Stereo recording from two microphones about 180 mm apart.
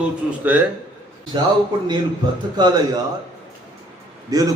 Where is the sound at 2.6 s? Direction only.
20° right (ahead or behind).